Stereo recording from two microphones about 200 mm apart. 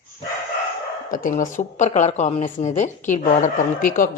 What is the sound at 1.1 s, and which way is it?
A woman's voice, 40° left (ahead or behind).